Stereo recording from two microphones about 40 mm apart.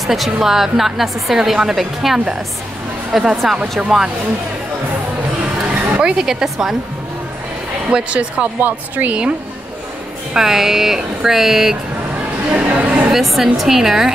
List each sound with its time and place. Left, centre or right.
0.0 s a woman's voice: centre
5.7 s a woman's voice: right
7.9 s speech: right
8.5 s speech: right
10.3 s a woman's voice: centre
12.5 s chatter: right
13.1 s a woman's voice: centre